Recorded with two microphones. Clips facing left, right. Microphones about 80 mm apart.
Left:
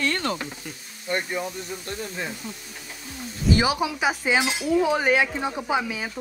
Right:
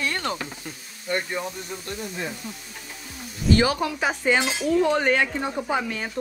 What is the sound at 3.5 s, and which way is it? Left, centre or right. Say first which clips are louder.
Speech: right 2 dB; centre.